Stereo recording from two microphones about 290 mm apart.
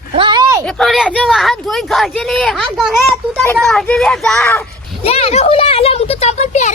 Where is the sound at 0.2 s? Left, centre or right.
Centre.